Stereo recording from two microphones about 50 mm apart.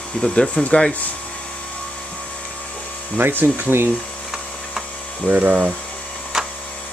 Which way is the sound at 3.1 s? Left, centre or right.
Right.